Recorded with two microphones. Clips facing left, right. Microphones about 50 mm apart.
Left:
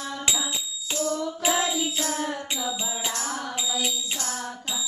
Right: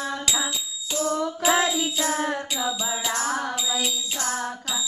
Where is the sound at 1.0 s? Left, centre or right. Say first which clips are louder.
Right 3 dB; right.